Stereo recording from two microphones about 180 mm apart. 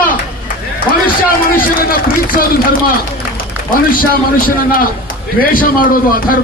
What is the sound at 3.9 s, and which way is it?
A man's voice, 50° left (ahead or behind).